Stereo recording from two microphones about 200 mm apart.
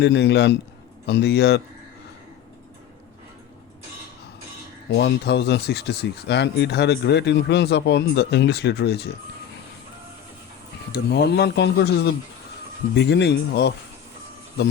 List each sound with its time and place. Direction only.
0.0 s speech: 60° left (ahead or behind)
4.9 s speech: 55° left (ahead or behind)
10.9 s speech: 55° left (ahead or behind)